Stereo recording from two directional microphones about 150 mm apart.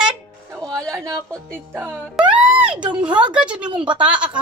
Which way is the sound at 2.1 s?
10° right (ahead or behind).